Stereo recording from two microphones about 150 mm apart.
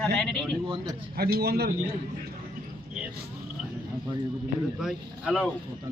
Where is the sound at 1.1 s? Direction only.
90° right.